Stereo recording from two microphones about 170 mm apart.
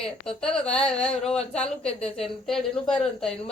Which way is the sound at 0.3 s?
5° left (ahead or behind).